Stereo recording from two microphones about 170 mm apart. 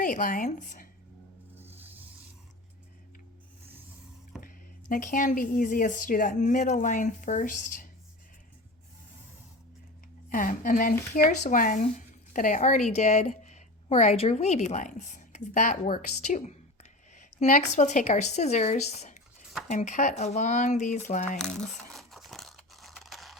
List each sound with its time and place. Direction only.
0.0 s speech: 50° left (ahead or behind)
1.5 s rub: 10° right (ahead or behind)
4.4 s speech: 50° left (ahead or behind)
10.2 s speech: 50° left (ahead or behind)
17.7 s speech: 45° left (ahead or behind)
21.9 s crushing: centre (ahead or behind)